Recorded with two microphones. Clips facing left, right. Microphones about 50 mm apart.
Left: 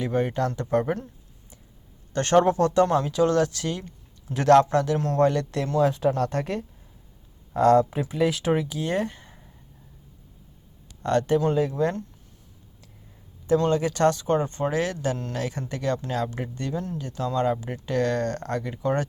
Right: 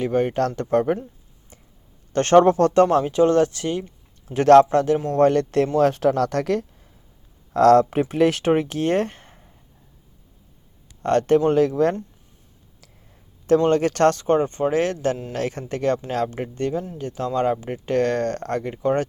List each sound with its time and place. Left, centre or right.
0.0 s speech: right
2.1 s speech: right
3.1 s speech: right
5.8 s speech: right
11.0 s speech: right
11.7 s speech: right
13.7 s speech: right